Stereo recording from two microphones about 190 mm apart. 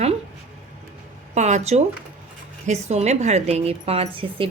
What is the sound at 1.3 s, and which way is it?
A woman's voice, 40° right (ahead or behind).